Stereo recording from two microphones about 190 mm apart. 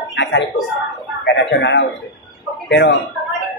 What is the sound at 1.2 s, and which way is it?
Speech, 70° left (ahead or behind).